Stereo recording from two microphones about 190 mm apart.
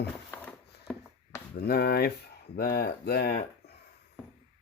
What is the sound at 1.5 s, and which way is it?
Speech, 55° left (ahead or behind).